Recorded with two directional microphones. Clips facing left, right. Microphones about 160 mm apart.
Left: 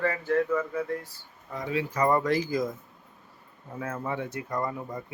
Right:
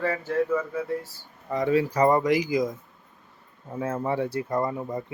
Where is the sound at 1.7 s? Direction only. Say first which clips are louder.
Right 5 dB; 40° right (ahead or behind).